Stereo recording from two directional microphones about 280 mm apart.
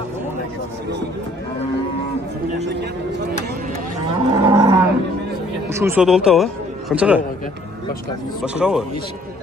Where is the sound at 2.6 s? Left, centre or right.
Right.